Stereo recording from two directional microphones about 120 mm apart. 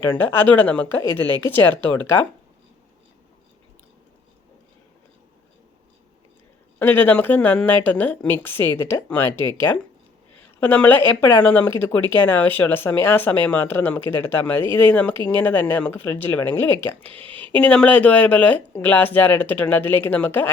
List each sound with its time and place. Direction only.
0.0 s speech: 15° left (ahead or behind)
6.7 s speech: 15° left (ahead or behind)
10.6 s speech: 15° left (ahead or behind)